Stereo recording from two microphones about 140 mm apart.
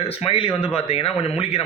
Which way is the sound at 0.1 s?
45° left (ahead or behind).